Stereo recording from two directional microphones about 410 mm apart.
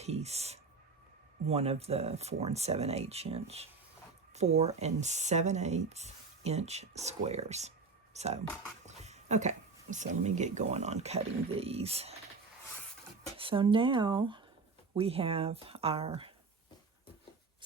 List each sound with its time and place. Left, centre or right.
0.0 s speech: centre
13.3 s speech: centre